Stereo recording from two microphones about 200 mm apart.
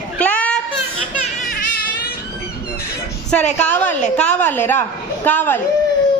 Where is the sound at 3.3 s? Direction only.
5° left (ahead or behind).